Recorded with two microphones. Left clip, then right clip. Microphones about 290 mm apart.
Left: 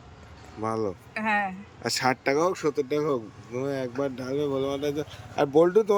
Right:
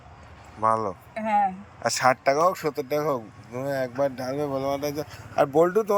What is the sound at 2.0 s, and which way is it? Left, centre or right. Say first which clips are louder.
Speech: right 4 dB; centre.